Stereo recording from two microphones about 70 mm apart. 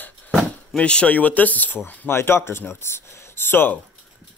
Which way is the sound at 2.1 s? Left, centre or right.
Left.